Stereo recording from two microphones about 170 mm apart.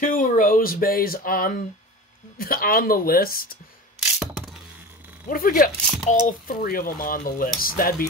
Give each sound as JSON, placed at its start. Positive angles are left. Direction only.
{"t": 0.0, "sound": "speech", "side_deg": 50}
{"t": 4.0, "sound": "a sound", "side_deg": 0}
{"t": 5.3, "sound": "speech", "side_deg": 55}